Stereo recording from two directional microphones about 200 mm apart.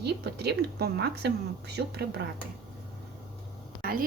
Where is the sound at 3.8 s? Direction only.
45° right (ahead or behind).